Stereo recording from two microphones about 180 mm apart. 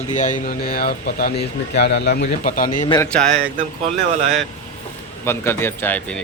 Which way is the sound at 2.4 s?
45° left (ahead or behind).